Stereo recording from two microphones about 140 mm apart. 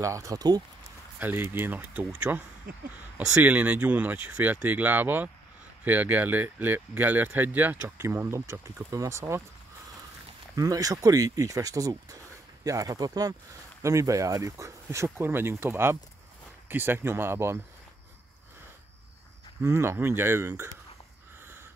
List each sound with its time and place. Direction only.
0.0 s speech: 20° right (ahead or behind)
1.2 s speech: 15° right (ahead or behind)
2.7 s a sound: 90° right
3.2 s speech: 10° right (ahead or behind)
10.5 s speech: 25° right (ahead or behind)
19.6 s speech: 20° right (ahead or behind)